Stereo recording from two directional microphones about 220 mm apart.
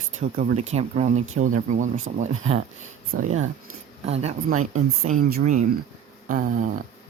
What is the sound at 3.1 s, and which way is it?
Speech, 40° right (ahead or behind).